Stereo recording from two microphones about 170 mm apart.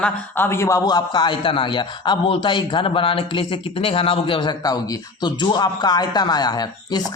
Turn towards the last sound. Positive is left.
turn(degrees=25)  # may be behind; listen again after turning